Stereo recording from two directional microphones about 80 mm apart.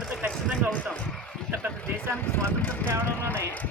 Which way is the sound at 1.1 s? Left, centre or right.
Centre.